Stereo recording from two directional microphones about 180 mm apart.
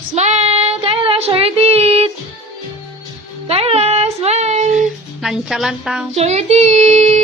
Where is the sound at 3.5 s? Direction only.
35° right (ahead or behind).